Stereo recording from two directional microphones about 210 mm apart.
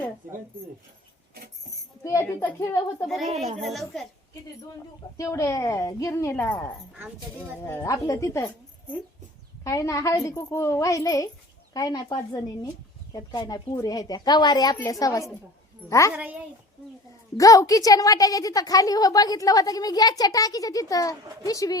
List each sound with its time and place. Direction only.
2.0 s a woman's voice: 10° left (ahead or behind)
3.1 s a child's voice: centre (ahead or behind)
5.1 s a woman's voice: 15° left (ahead or behind)
9.6 s a woman's voice: 15° left (ahead or behind)
16.1 s a woman's voice: 10° right (ahead or behind)
17.3 s a woman's voice: 15° left (ahead or behind)